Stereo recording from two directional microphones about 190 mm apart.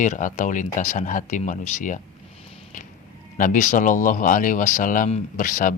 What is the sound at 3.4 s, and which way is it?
Speech, 40° left (ahead or behind).